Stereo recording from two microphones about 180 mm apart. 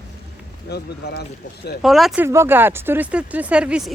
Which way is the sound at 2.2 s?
15° right (ahead or behind).